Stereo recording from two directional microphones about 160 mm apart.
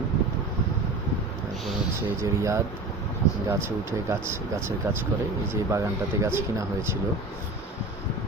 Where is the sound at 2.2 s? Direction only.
20° right (ahead or behind).